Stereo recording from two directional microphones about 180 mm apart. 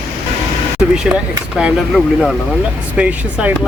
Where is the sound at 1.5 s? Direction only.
Centre (ahead or behind).